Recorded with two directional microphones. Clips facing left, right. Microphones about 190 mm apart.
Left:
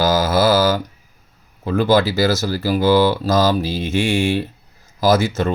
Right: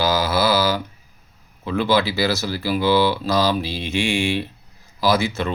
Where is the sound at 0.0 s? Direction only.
45° left (ahead or behind).